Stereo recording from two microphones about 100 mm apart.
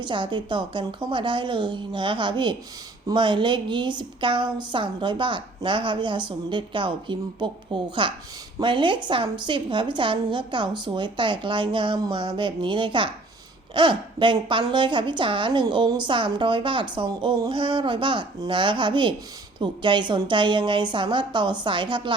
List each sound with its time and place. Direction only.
0.0 s a woman's voice: 50° right (ahead or behind)